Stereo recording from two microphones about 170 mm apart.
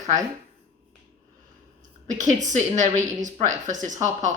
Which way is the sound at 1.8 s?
45° right (ahead or behind).